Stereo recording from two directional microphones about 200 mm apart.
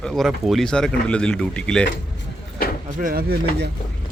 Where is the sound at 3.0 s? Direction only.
50° right (ahead or behind).